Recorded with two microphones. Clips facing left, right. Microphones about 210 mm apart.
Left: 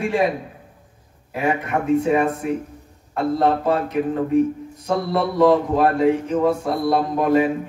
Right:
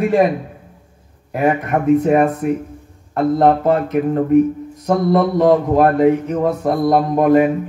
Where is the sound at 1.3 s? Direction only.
50° right (ahead or behind).